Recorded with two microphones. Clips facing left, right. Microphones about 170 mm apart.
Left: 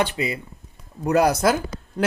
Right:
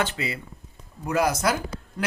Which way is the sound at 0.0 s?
15° left (ahead or behind).